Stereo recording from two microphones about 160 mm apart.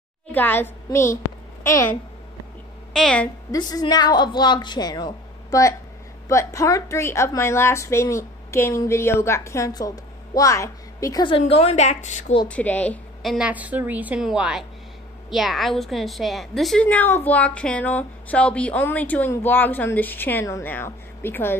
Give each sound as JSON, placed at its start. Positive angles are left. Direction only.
{"t": 0.3, "sound": "a woman's voice", "side_deg": 10}
{"t": 0.8, "sound": "a sound", "side_deg": 20}
{"t": 2.9, "sound": "a woman's voice", "side_deg": 5}
{"t": 3.5, "sound": "a woman's voice", "side_deg": 25}
{"t": 11.3, "sound": "a woman's voice", "side_deg": 35}
{"t": 12.4, "sound": "a woman's voice", "side_deg": 10}